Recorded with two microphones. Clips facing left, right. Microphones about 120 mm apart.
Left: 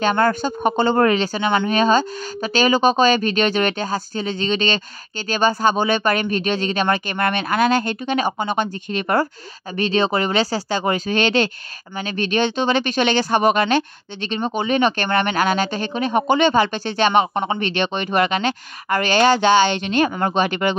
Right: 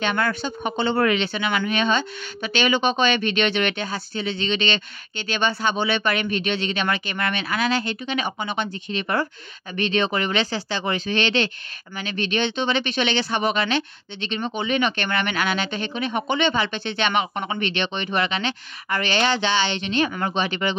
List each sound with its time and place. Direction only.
0.0 s speech: 40° left (ahead or behind)